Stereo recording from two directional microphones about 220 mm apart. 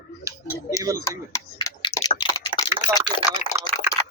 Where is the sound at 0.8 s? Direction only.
15° right (ahead or behind).